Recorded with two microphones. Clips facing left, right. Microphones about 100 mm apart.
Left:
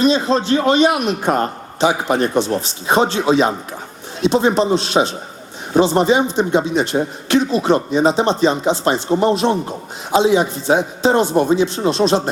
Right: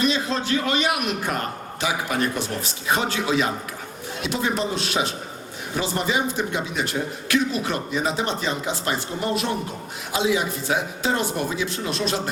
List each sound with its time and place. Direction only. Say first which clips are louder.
0.0 s a man's voice: left 8 dB; 25° left (ahead or behind)